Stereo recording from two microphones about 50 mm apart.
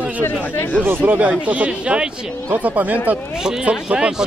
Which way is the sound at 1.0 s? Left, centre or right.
Right.